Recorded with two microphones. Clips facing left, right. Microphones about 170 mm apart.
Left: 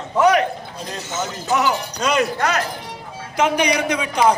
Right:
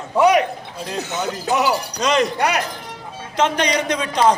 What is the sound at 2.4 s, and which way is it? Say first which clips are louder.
Speech: right 1 dB; 15° right (ahead or behind).